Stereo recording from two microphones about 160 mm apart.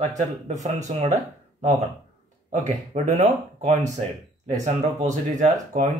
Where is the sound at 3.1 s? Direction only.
45° right (ahead or behind).